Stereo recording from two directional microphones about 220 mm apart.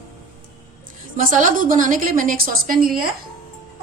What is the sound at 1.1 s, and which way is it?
A woman's voice, 35° right (ahead or behind).